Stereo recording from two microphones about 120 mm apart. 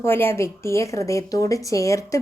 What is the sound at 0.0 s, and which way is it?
A woman's voice, 20° left (ahead or behind).